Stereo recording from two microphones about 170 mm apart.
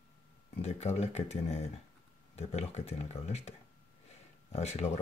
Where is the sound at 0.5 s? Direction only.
40° left (ahead or behind).